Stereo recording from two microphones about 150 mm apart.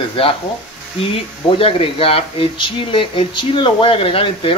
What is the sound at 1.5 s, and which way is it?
Speech, 40° left (ahead or behind).